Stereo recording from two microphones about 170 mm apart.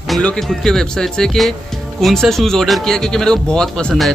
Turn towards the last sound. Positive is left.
turn(degrees=5)  # may be behind; listen again after turning